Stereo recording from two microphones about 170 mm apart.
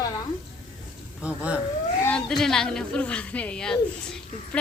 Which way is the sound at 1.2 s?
5° right (ahead or behind).